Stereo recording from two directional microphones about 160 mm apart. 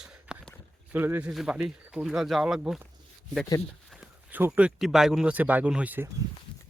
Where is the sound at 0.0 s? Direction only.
5° right (ahead or behind).